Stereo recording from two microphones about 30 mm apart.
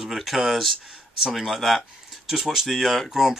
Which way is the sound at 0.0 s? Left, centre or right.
Centre.